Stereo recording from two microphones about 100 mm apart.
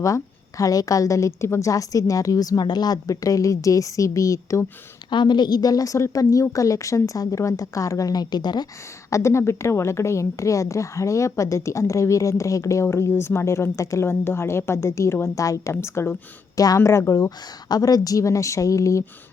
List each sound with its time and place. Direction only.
0.0 s a woman's voice: 35° left (ahead or behind)
5.1 s a woman's voice: 50° left (ahead or behind)
9.0 s a woman's voice: 30° left (ahead or behind)